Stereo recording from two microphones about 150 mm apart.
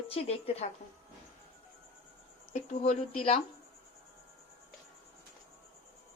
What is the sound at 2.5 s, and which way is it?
Speech, 50° left (ahead or behind).